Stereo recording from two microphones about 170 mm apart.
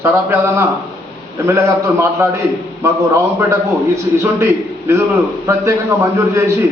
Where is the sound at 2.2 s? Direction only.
15° right (ahead or behind).